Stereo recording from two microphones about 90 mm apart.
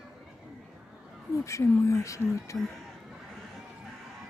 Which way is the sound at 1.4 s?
35° left (ahead or behind).